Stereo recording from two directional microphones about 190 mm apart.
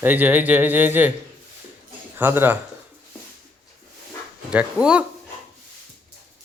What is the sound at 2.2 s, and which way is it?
Speech, 10° right (ahead or behind).